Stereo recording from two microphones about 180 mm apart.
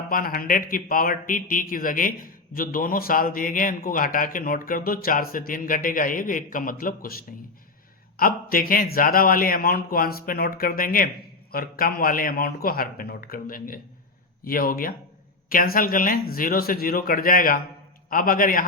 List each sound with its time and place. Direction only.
0.1 s speech: 55° left (ahead or behind)